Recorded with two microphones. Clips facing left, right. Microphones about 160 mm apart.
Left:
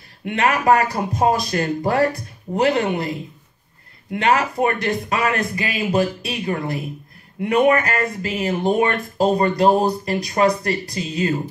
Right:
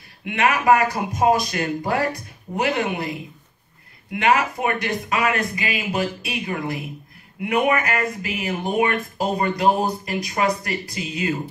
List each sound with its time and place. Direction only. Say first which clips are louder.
0.2 s speech: left 1 dB; 40° left (ahead or behind)